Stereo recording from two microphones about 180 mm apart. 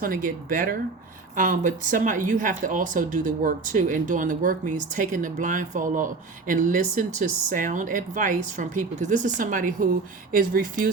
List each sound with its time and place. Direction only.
0.0 s speech: 50° right (ahead or behind)